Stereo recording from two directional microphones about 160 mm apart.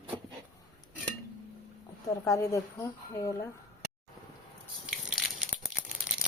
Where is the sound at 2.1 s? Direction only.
20° left (ahead or behind).